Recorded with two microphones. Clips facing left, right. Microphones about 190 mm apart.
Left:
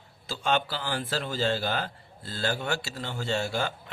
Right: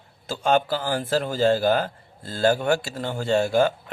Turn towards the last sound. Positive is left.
turn(degrees=-50)  # may be behind; listen again after turning